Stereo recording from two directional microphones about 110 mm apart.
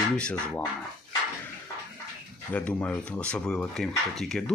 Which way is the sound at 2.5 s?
15° left (ahead or behind).